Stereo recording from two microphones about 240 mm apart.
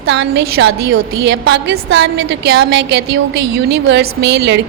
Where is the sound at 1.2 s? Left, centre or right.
Right.